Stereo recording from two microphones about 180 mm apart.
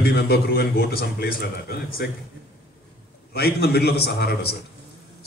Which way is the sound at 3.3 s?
65° left (ahead or behind).